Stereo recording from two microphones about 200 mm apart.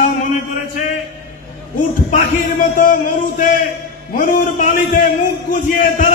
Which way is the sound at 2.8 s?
40° left (ahead or behind).